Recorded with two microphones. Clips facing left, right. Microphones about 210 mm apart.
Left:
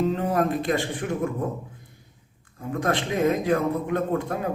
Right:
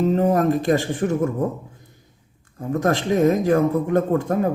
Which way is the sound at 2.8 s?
45° right (ahead or behind).